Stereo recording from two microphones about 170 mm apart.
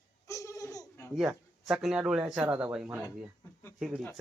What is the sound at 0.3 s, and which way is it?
Laughter, 15° left (ahead or behind).